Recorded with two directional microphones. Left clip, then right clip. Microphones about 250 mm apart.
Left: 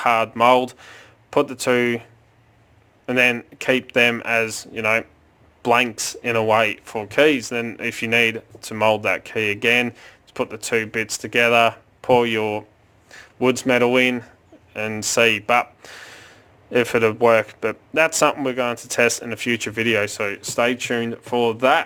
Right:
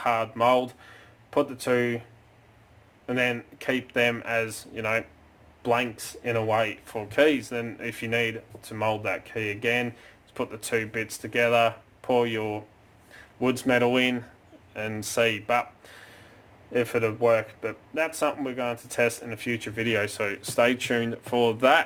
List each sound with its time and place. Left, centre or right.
0.0 s speech: left
3.1 s speech: left
5.6 s speech: left
6.8 s speech: left
15.4 s a sound: left
16.7 s speech: left; by 21.8 s centre